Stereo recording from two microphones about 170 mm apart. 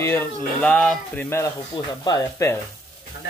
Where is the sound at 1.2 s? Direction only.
15° left (ahead or behind).